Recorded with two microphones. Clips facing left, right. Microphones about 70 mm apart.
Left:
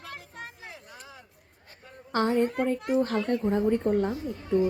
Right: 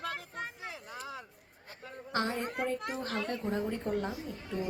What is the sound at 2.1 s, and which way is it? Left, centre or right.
A woman's voice, left.